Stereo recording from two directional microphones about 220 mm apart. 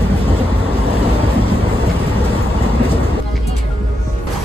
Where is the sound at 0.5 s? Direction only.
25° left (ahead or behind).